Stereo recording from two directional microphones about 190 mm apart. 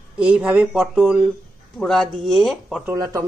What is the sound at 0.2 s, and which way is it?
Speech, 5° right (ahead or behind).